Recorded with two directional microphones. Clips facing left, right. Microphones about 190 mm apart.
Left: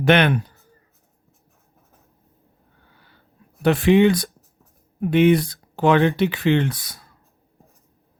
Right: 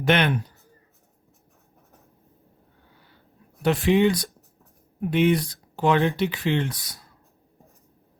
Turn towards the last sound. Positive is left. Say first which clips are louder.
# left 5 dB
turn(degrees=70)  # may be behind; listen again after turning